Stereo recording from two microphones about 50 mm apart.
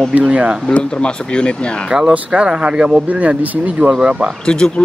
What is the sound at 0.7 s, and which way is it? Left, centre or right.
Speech, left.